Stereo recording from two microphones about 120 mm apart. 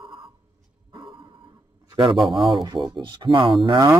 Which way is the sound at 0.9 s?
45° right (ahead or behind).